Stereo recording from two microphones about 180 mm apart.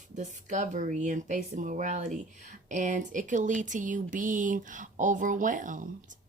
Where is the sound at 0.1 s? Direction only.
40° right (ahead or behind).